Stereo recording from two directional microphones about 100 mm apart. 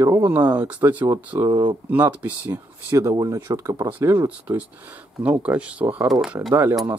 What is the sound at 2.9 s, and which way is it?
Speech, 35° right (ahead or behind).